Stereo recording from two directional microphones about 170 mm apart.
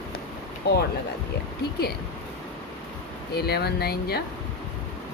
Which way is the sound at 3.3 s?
70° left (ahead or behind).